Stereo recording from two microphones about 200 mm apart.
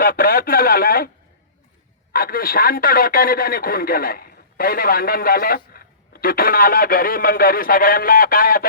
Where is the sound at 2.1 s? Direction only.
45° left (ahead or behind).